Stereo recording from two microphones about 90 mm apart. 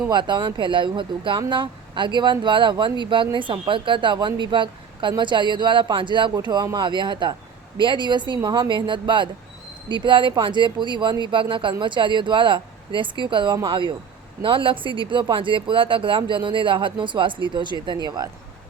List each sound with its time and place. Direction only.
0.1 s speech: 55° right (ahead or behind)
6.4 s speech: 50° right (ahead or behind)